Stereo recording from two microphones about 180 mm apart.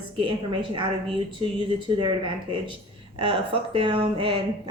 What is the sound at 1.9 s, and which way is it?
A woman's voice, 25° right (ahead or behind).